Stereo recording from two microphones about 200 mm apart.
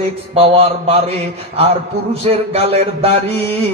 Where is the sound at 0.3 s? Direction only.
30° right (ahead or behind).